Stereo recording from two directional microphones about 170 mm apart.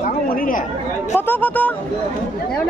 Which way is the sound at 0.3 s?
55° left (ahead or behind).